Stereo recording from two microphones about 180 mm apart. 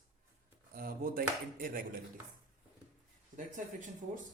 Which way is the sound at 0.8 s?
55° right (ahead or behind).